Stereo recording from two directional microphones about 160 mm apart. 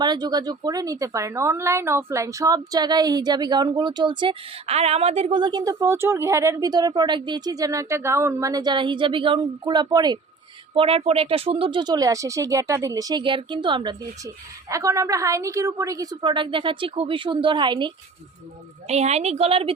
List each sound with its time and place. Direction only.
0.0 s a woman's voice: 25° right (ahead or behind)
10.8 s a woman's voice: 35° right (ahead or behind)
14.7 s a woman's voice: 20° right (ahead or behind)
18.9 s speech: 45° right (ahead or behind)